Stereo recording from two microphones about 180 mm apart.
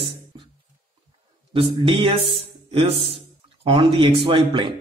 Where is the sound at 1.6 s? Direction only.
30° right (ahead or behind).